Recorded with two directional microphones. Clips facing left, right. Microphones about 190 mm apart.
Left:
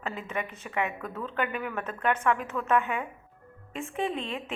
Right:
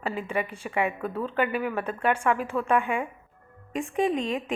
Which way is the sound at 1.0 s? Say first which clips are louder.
Right 6 dB; 30° right (ahead or behind).